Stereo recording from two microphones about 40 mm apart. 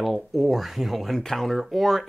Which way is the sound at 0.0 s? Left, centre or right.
Centre.